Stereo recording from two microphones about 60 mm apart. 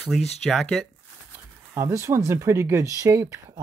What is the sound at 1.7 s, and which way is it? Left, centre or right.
Speech, right.